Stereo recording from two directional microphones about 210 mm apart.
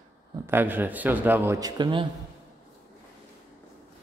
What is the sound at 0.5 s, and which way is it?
A man's voice, 10° right (ahead or behind).